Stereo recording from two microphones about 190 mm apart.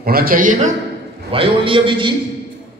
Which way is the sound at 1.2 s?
30° right (ahead or behind).